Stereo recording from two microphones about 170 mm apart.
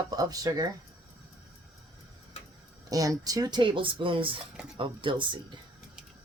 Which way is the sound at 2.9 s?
20° right (ahead or behind).